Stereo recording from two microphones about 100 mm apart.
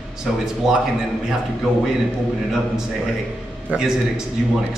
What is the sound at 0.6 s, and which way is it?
Speech, 5° right (ahead or behind).